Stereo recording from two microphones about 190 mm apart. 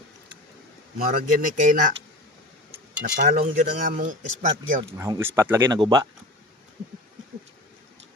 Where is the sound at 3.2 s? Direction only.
45° right (ahead or behind).